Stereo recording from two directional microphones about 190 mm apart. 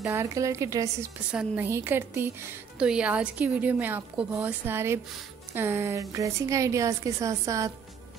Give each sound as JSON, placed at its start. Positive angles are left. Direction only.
{"t": 0.0, "sound": "a woman's voice", "side_deg": -10}
{"t": 1.3, "sound": "a woman's voice", "side_deg": -5}